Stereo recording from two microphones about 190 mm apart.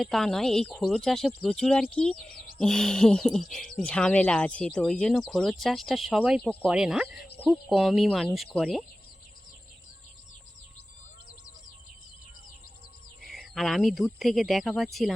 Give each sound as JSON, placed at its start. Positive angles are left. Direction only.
{"t": 0.0, "sound": "speech", "side_deg": 0}
{"t": 2.1, "sound": "speech", "side_deg": 45}
{"t": 2.6, "sound": "speech", "side_deg": 5}
{"t": 6.4, "sound": "speech", "side_deg": 5}
{"t": 6.7, "sound": "speech", "side_deg": -5}
{"t": 13.2, "sound": "cricket", "side_deg": 0}
{"t": 14.2, "sound": "speech", "side_deg": 0}